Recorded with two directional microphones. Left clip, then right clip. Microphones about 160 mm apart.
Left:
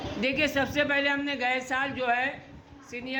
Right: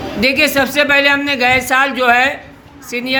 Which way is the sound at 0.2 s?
5° right (ahead or behind).